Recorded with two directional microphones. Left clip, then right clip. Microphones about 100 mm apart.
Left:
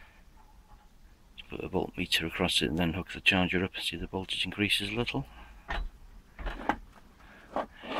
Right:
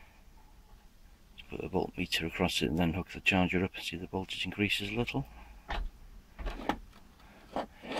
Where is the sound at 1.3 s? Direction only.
5° right (ahead or behind).